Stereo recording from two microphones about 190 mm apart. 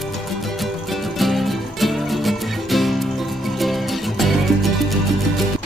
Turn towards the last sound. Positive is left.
turn(degrees=0)  # may be behind; listen again after turning